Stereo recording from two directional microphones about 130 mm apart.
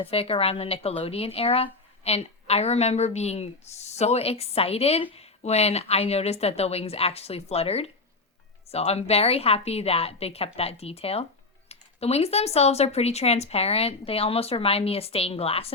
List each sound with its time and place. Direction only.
0.0 s speech: 50° left (ahead or behind)